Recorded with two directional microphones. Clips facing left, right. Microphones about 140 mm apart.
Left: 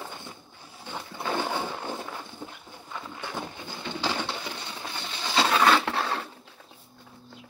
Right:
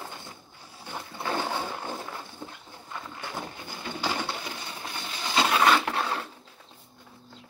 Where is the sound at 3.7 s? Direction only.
25° left (ahead or behind).